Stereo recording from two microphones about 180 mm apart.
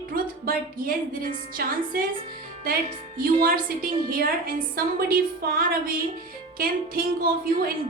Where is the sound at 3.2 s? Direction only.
50° right (ahead or behind).